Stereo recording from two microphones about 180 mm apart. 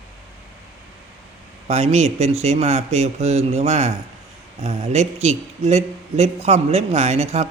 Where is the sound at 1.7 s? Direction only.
35° right (ahead or behind).